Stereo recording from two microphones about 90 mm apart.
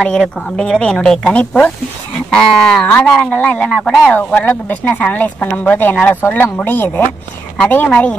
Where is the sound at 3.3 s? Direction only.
20° left (ahead or behind).